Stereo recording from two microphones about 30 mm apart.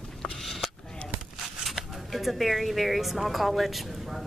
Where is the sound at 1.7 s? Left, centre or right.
Centre.